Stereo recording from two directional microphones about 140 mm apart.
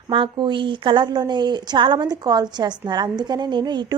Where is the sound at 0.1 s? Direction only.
35° right (ahead or behind).